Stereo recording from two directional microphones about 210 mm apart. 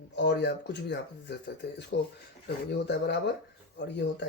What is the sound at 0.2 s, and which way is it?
Speech, 55° left (ahead or behind).